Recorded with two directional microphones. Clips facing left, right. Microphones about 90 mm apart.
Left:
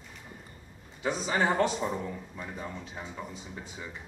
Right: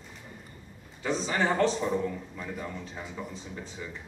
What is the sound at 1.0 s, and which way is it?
Speech, 15° left (ahead or behind).